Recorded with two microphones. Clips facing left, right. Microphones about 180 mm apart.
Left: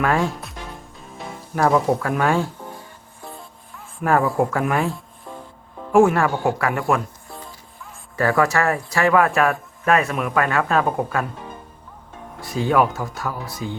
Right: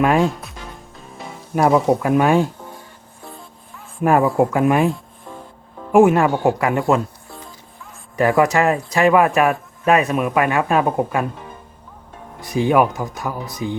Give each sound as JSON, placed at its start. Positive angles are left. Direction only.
{"t": 0.0, "sound": "speech", "side_deg": -15}
{"t": 1.5, "sound": "speech", "side_deg": -15}
{"t": 4.0, "sound": "speech", "side_deg": -20}
{"t": 8.1, "sound": "speech", "side_deg": -20}
{"t": 12.4, "sound": "speech", "side_deg": -20}